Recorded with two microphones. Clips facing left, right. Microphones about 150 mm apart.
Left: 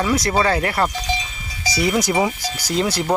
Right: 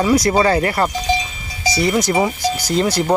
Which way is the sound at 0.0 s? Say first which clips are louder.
Right 4 dB; 5° right (ahead or behind).